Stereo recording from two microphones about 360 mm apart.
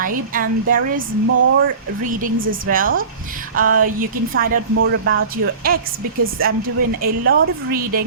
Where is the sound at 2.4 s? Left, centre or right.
Right.